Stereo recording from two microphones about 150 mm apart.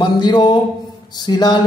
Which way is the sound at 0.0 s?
30° left (ahead or behind).